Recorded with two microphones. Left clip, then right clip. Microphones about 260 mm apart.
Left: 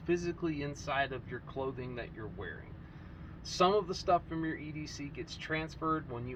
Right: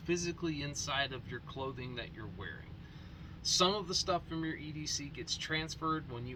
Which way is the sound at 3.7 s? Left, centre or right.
Right.